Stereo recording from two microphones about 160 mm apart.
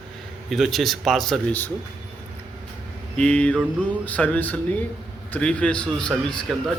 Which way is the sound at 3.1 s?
5° left (ahead or behind).